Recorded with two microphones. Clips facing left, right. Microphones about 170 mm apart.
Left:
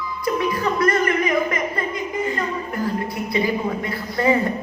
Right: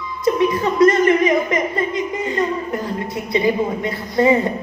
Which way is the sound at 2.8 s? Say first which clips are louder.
Even; 25° right (ahead or behind).